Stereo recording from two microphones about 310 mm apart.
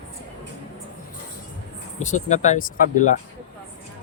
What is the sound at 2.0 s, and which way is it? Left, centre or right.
Speech, left.